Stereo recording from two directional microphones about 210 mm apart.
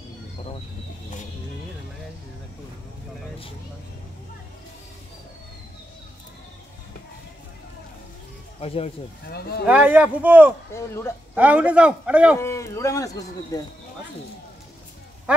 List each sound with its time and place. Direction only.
8.5 s speech: 30° left (ahead or behind)
9.3 s speech: 50° left (ahead or behind)
9.7 s a man's voice: 5° right (ahead or behind)
12.4 s speech: 15° left (ahead or behind)
15.3 s speech: 5° right (ahead or behind)